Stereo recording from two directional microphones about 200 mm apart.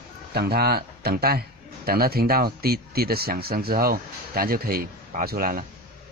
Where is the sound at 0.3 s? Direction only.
50° right (ahead or behind).